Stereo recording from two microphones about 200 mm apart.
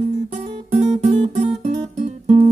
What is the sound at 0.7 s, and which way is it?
Guitar, 30° right (ahead or behind).